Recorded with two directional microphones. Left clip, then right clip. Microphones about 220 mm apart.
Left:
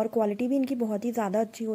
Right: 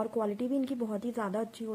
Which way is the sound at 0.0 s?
25° left (ahead or behind).